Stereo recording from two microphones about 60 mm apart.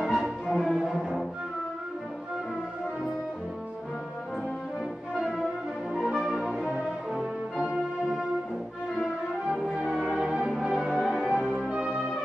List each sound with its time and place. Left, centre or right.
0.0 s music: centre
0.8 s cello: centre
5.9 s french horn: centre
10.0 s music: centre
11.7 s music: centre